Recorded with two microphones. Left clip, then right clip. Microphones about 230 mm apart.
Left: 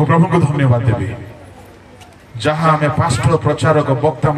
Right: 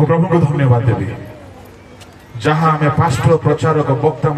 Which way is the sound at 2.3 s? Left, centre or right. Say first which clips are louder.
Even; left.